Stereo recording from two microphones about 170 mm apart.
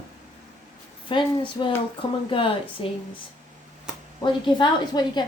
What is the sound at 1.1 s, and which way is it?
A woman's voice, 30° left (ahead or behind).